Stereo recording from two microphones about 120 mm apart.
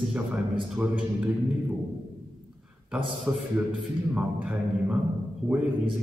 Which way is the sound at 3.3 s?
10° right (ahead or behind).